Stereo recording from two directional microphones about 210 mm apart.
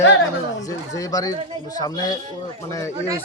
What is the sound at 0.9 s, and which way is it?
A man's voice, 15° left (ahead or behind).